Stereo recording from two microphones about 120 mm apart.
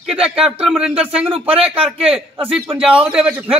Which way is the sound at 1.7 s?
55° right (ahead or behind).